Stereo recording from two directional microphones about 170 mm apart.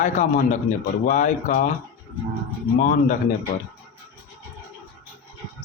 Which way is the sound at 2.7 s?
50° left (ahead or behind).